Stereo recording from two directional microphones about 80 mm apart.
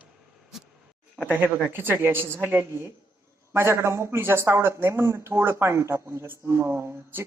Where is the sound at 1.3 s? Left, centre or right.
Centre.